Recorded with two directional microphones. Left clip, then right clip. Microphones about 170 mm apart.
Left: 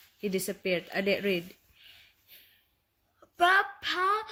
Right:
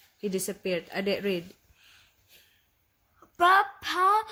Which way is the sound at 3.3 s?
55° right (ahead or behind).